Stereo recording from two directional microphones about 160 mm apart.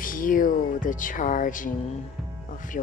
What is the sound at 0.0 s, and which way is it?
Speech, 60° left (ahead or behind).